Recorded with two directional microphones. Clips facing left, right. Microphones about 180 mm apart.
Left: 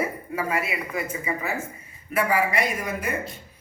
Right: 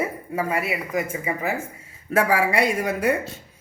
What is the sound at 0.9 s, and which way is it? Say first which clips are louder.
Speech: right 4 dB; 50° right (ahead or behind).